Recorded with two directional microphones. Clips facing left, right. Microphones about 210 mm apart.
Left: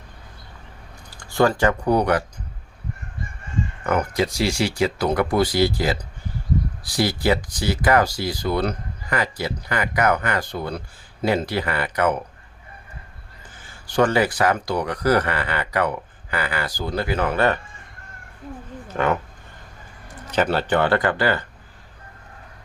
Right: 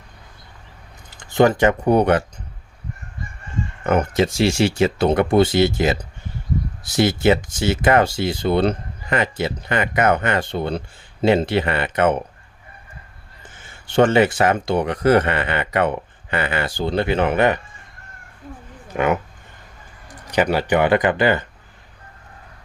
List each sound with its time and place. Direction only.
1.1 s speech: 20° right (ahead or behind)
3.8 s speech: 25° right (ahead or behind)
13.6 s speech: 25° right (ahead or behind)
18.9 s speech: 15° right (ahead or behind)